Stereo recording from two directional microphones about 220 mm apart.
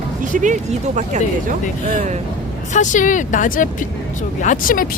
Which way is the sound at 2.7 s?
35° left (ahead or behind).